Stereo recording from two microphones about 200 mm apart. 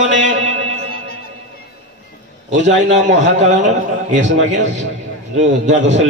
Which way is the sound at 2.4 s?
35° right (ahead or behind).